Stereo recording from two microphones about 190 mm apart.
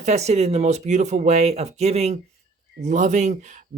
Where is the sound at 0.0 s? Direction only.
35° right (ahead or behind).